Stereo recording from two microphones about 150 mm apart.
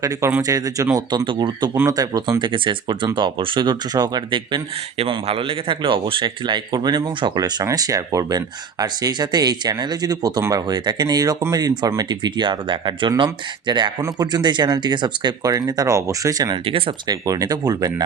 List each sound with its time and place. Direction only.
0.0 s speech: 15° right (ahead or behind)
1.7 s speech: 15° right (ahead or behind)
16.6 s speech: 40° right (ahead or behind)
17.1 s speech: 25° right (ahead or behind)